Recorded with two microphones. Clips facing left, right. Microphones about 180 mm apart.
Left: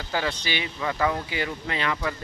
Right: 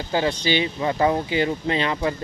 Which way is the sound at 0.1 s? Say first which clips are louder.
Right 7 dB; 20° right (ahead or behind).